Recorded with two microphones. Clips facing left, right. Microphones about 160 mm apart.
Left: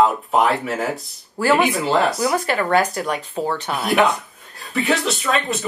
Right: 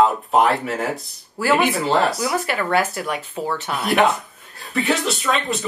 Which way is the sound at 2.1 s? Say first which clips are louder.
Left 3 dB; 40° left (ahead or behind).